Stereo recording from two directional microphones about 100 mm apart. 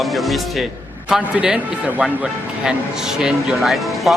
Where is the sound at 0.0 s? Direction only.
Centre (ahead or behind).